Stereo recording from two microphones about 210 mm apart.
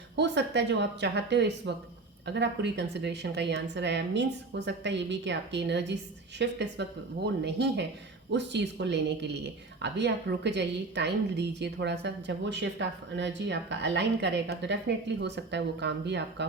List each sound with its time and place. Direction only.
0.2 s speech: 55° right (ahead or behind)